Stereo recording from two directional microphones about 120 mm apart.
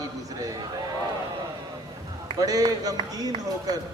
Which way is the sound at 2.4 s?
30° right (ahead or behind).